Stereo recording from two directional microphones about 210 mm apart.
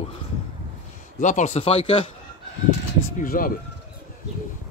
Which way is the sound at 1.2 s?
35° left (ahead or behind).